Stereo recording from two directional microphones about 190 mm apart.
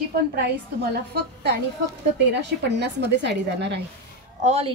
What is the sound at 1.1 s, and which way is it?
A woman's voice, 60° right (ahead or behind).